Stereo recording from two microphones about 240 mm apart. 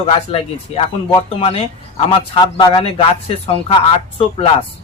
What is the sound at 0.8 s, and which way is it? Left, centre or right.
Speech, left.